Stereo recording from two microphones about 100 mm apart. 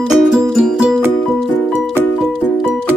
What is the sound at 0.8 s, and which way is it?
Music, 15° right (ahead or behind).